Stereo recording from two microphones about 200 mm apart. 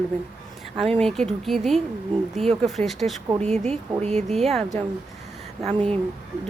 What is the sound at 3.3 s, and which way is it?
Speech, 30° right (ahead or behind).